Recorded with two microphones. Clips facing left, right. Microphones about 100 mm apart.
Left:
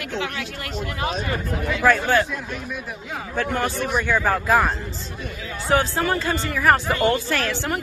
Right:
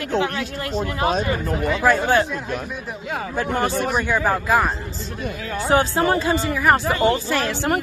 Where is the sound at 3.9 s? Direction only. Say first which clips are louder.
Right 1 dB; 10° right (ahead or behind).